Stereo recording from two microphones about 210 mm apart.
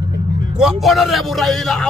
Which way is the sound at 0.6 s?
Centre (ahead or behind).